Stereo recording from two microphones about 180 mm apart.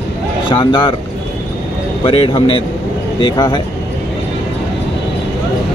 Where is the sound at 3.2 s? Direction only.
25° left (ahead or behind).